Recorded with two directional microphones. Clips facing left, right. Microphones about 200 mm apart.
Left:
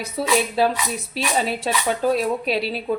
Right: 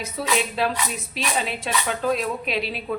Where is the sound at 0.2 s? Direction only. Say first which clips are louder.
Left 5 dB; 30° left (ahead or behind).